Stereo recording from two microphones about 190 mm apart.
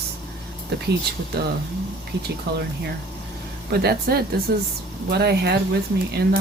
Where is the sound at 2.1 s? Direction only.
60° right (ahead or behind).